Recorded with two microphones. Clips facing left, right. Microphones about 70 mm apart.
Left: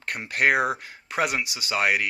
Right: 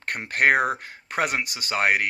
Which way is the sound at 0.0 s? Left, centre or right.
Right.